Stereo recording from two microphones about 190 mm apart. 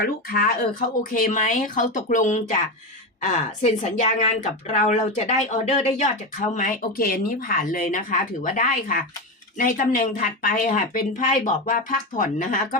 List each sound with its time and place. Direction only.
0.0 s a woman's voice: 50° left (ahead or behind)